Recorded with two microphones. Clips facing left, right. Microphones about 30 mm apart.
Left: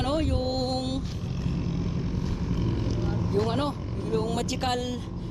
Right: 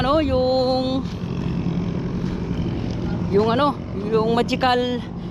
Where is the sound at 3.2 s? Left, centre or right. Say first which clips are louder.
Right 10 dB; right.